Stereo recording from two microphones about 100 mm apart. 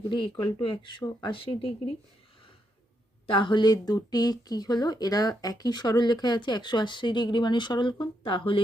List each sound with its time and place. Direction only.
0.1 s speech: 55° left (ahead or behind)
3.2 s speech: 55° left (ahead or behind)